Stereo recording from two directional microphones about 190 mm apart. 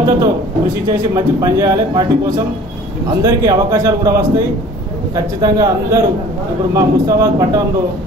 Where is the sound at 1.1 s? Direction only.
20° right (ahead or behind).